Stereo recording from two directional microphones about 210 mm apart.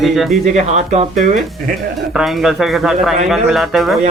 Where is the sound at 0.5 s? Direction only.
35° right (ahead or behind).